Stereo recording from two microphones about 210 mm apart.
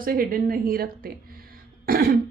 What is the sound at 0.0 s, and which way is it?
A woman's voice, 45° right (ahead or behind).